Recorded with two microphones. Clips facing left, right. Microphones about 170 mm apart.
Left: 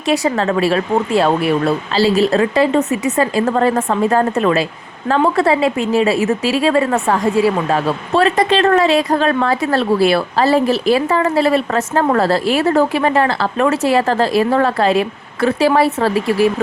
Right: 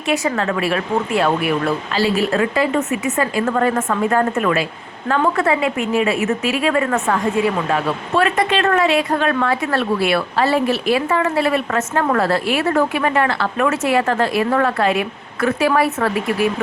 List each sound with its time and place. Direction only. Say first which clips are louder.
0.1 s a woman's voice: left 4 dB; 35° left (ahead or behind)